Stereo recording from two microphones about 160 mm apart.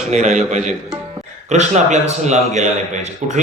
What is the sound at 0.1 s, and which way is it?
Speech, 50° right (ahead or behind).